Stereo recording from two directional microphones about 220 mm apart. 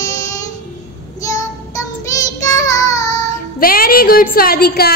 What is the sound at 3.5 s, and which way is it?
A woman's voice, 40° left (ahead or behind).